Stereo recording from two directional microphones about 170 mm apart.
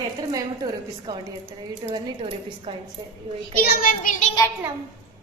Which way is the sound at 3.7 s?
55° left (ahead or behind).